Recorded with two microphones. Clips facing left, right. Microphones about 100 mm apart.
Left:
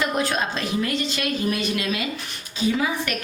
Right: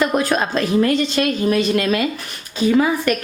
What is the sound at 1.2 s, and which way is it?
A woman's voice, 40° right (ahead or behind).